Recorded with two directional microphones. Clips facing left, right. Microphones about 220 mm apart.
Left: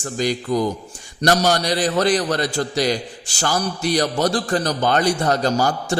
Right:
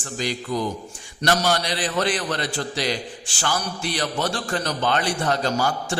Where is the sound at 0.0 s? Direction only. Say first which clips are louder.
Left 6 dB; 45° left (ahead or behind).